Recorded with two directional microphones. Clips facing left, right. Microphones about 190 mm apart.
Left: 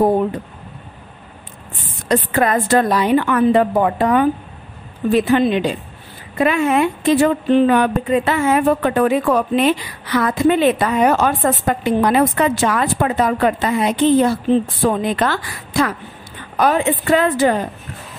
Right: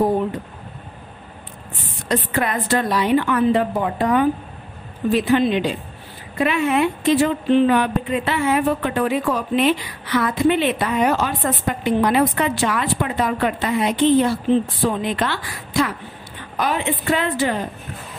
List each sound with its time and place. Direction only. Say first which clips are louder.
2.0 s speech: left 5 dB; 45° left (ahead or behind)